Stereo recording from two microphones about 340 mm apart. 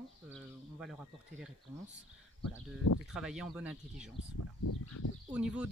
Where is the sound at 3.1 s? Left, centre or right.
Centre.